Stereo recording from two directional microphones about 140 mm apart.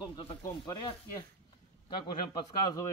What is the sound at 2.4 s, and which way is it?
Speech, 20° left (ahead or behind).